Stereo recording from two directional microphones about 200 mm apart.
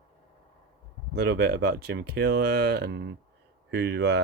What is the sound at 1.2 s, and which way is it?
Speech, 55° right (ahead or behind).